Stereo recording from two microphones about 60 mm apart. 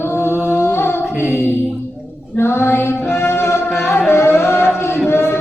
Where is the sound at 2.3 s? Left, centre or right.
Left.